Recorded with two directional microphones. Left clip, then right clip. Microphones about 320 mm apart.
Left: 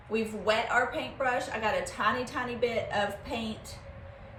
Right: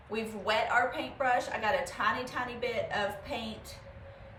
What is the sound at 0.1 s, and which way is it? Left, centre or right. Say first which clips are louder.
A woman's voice: left 3 dB; centre.